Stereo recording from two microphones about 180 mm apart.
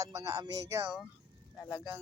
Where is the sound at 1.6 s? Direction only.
15° left (ahead or behind).